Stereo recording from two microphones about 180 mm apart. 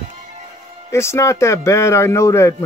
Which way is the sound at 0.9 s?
15° left (ahead or behind).